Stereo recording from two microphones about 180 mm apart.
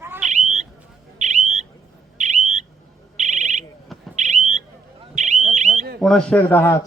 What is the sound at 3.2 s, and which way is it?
Alarm, 40° right (ahead or behind).